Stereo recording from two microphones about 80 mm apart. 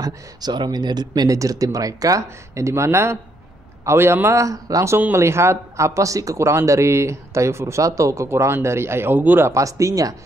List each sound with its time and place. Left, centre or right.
0.0 s speech: right
4.5 s speech: right
4.9 s speech: right
9.5 s speech: right